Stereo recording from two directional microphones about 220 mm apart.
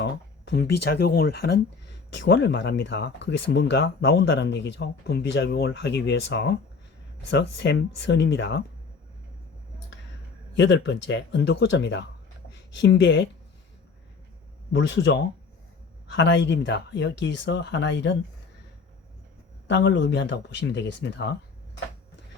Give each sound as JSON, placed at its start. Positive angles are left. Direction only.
{"t": 0.0, "sound": "speech", "side_deg": 50}
{"t": 10.6, "sound": "speech", "side_deg": 55}
{"t": 14.7, "sound": "speech", "side_deg": 55}
{"t": 19.6, "sound": "speech", "side_deg": 55}